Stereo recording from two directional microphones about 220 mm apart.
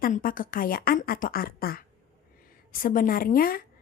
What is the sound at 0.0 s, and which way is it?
A woman's voice, 40° left (ahead or behind).